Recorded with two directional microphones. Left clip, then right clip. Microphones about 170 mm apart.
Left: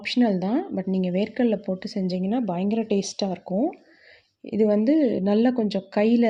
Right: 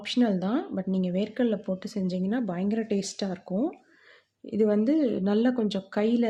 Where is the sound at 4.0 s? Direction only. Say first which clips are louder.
Left 4 dB; 15° left (ahead or behind).